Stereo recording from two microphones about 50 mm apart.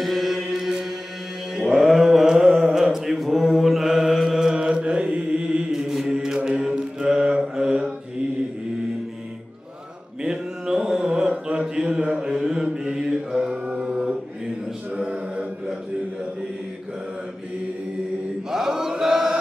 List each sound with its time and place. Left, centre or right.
0.0 s chant: centre
1.5 s mantra: centre
4.4 s mantra: centre
5.7 s mantra: centre
10.2 s mantra: centre
15.0 s a capella: right
18.5 s chant: centre